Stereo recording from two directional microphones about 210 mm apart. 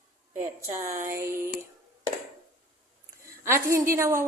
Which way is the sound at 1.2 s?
15° right (ahead or behind).